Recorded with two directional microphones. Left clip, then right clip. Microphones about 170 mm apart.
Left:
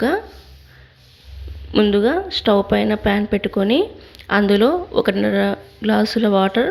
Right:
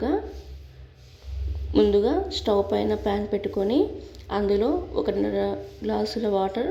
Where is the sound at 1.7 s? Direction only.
15° left (ahead or behind).